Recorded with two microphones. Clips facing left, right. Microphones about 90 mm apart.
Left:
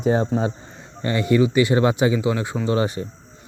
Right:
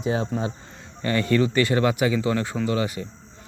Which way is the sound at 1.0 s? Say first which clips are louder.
Left 3 dB; 20° left (ahead or behind).